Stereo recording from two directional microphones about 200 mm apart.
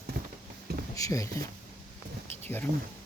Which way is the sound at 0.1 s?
50° right (ahead or behind).